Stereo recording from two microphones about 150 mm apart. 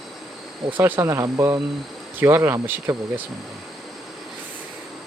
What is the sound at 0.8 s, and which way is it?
Speech, 15° right (ahead or behind).